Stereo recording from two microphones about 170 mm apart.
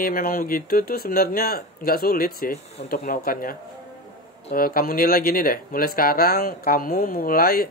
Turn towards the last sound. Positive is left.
turn(degrees=60)  # may be behind; listen again after turning